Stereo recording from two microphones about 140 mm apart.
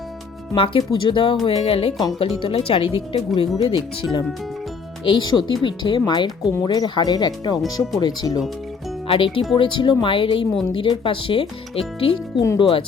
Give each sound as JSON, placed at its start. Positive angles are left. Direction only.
{"t": 0.5, "sound": "speech", "side_deg": 40}
{"t": 5.0, "sound": "speech", "side_deg": 35}
{"t": 9.0, "sound": "speech", "side_deg": 40}